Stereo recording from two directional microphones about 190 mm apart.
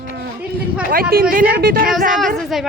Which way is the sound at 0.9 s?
50° right (ahead or behind).